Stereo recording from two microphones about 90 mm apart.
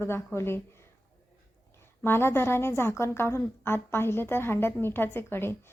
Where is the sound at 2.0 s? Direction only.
25° left (ahead or behind).